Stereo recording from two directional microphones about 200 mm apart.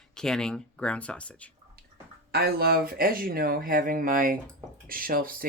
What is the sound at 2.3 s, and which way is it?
Speech, 50° right (ahead or behind).